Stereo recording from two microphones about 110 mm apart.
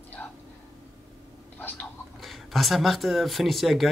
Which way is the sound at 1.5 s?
15° left (ahead or behind).